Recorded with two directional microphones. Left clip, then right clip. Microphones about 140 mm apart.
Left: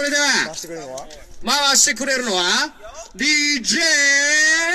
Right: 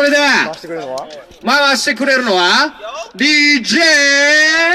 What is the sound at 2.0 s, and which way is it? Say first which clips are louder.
Speech: right 8 dB; 55° right (ahead or behind).